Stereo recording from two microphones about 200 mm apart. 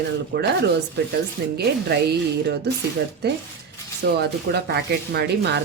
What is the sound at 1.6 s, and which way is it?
Speech, 55° right (ahead or behind).